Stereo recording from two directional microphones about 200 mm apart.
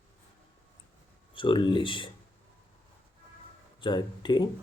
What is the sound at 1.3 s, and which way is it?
Speech, 25° left (ahead or behind).